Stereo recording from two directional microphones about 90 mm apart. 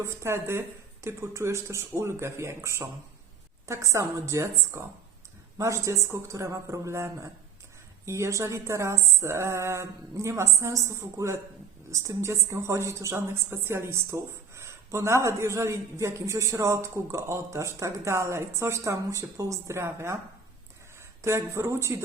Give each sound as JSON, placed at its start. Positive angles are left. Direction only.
{"t": 0.0, "sound": "a woman's voice", "side_deg": -30}
{"t": 21.2, "sound": "a woman's voice", "side_deg": -30}